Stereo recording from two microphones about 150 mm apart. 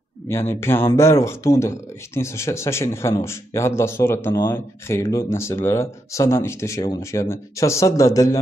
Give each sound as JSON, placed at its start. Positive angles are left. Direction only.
{"t": 0.3, "sound": "speech", "side_deg": 15}